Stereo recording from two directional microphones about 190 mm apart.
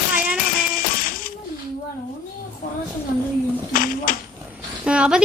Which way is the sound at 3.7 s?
45° left (ahead or behind).